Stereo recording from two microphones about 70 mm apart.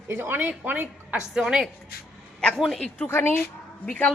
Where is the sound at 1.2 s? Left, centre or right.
Centre.